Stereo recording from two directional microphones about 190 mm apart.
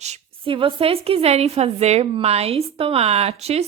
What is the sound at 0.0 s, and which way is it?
A woman's voice, 30° right (ahead or behind).